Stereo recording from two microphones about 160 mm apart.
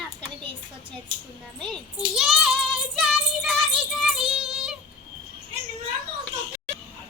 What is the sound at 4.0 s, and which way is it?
Music, centre (ahead or behind).